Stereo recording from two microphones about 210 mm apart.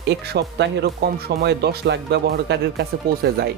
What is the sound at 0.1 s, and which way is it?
Speech, 55° right (ahead or behind).